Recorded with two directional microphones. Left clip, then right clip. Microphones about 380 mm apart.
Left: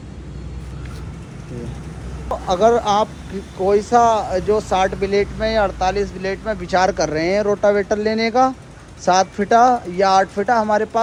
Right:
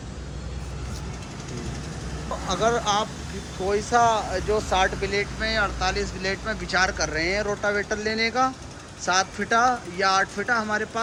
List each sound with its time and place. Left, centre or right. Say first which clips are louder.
2.5 s speech: left 8 dB; centre